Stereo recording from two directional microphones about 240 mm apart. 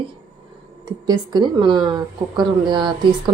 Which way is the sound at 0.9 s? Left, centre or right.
Centre.